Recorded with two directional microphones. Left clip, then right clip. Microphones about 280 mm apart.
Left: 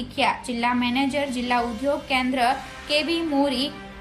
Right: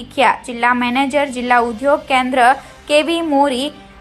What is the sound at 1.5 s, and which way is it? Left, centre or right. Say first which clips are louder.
Speech: right 11 dB; right.